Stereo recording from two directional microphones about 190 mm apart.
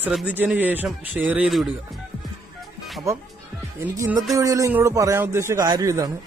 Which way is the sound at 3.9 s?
15° right (ahead or behind).